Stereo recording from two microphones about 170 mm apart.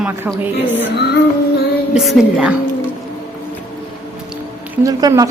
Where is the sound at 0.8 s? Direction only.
75° left (ahead or behind).